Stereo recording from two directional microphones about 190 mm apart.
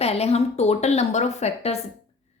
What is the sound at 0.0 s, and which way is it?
A woman's voice, 35° left (ahead or behind).